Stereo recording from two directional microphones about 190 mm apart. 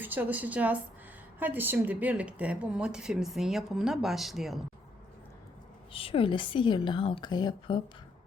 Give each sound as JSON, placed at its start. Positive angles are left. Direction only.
{"t": 0.0, "sound": "a woman's voice", "side_deg": -10}
{"t": 5.9, "sound": "a woman's voice", "side_deg": 30}